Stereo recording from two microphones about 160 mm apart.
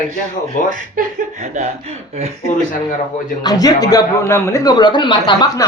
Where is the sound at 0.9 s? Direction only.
50° right (ahead or behind).